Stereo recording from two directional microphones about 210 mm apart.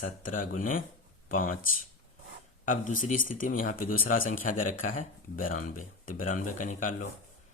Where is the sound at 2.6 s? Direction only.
40° left (ahead or behind).